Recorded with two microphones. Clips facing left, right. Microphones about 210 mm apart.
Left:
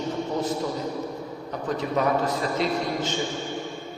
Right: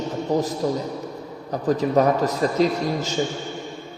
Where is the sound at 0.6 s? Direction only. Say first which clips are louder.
Right 4 dB; 45° right (ahead or behind).